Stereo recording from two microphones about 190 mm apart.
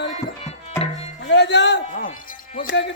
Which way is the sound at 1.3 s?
65° left (ahead or behind).